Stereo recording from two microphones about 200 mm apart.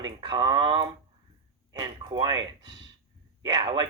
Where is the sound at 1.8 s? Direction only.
20° right (ahead or behind).